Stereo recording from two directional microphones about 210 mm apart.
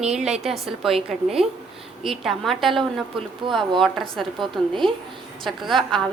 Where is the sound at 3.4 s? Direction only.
20° right (ahead or behind).